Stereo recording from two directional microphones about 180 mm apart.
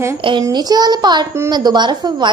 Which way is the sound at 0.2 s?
25° right (ahead or behind).